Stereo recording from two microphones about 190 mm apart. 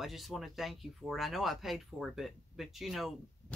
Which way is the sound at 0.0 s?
Centre (ahead or behind).